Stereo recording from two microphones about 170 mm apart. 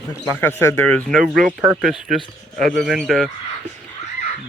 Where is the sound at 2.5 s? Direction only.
50° right (ahead or behind).